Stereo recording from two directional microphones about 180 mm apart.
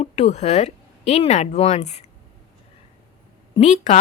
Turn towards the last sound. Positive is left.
turn(degrees=40)  # may be behind; listen again after turning